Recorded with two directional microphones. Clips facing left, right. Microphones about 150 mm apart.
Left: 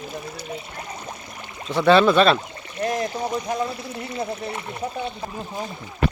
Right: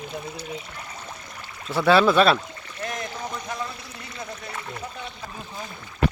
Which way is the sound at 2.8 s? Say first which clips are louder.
Left 8 dB; 30° left (ahead or behind).